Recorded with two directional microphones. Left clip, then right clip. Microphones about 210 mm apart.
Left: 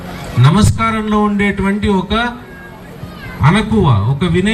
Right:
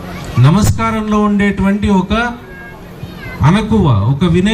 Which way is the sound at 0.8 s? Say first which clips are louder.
Even; 50° right (ahead or behind).